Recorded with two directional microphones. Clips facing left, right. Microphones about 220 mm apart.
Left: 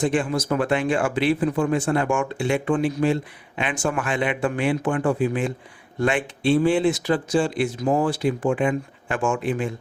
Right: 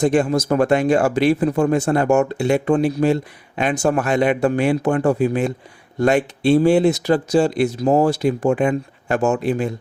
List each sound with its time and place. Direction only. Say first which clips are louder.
0.0 s speech: right 5 dB; 40° right (ahead or behind)